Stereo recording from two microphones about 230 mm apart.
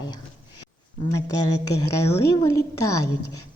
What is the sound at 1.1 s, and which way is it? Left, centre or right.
A woman's voice, centre.